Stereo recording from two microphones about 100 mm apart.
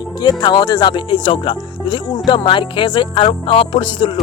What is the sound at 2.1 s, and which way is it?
Music, 55° left (ahead or behind).